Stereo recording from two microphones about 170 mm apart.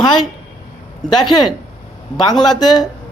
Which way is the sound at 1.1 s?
25° left (ahead or behind).